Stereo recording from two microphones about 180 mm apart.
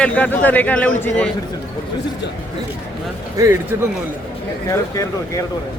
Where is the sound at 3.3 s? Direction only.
15° right (ahead or behind).